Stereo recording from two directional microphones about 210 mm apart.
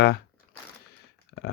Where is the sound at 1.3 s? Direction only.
70° left (ahead or behind).